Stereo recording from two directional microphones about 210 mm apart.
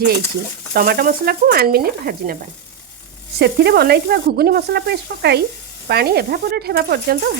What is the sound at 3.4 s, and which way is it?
Speech, 50° right (ahead or behind).